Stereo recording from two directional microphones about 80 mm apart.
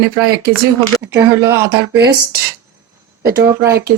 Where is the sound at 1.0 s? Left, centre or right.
Right.